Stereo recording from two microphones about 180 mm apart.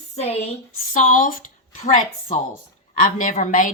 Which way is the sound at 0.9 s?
50° left (ahead or behind).